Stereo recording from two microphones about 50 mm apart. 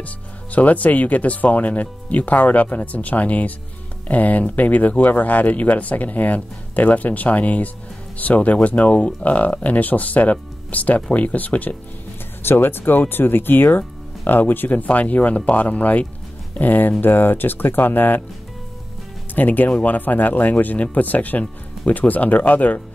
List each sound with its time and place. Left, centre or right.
0.0 s speech: left
12.4 s speech: left
19.3 s speech: left